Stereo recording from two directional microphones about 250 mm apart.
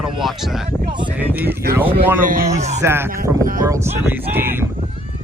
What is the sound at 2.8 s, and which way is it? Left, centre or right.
Speech, centre.